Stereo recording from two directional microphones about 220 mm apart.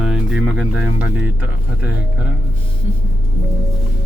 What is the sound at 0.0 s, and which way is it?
Speech, 5° right (ahead or behind).